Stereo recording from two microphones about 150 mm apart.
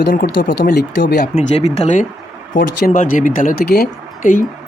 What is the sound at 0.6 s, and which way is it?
Speech, 80° left.